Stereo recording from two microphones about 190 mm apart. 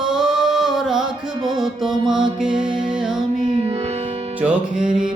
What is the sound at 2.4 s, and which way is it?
Music, 5° right (ahead or behind).